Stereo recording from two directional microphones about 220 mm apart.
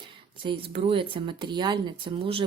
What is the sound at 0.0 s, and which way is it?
Speech, 20° right (ahead or behind).